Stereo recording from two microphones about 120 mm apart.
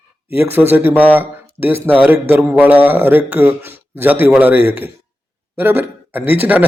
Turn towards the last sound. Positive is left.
turn(degrees=-15)  # may be behind; listen again after turning